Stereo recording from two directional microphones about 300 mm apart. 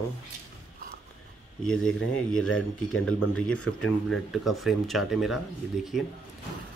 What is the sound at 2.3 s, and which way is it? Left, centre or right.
Speech, centre.